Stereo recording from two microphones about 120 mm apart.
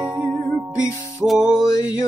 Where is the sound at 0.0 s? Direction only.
10° right (ahead or behind).